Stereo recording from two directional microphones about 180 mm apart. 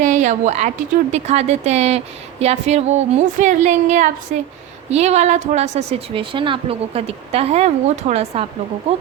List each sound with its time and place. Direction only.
0.0 s a woman's voice: 40° right (ahead or behind)